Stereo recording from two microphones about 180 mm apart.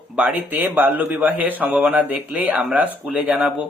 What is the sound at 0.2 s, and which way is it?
A man's voice, 10° right (ahead or behind).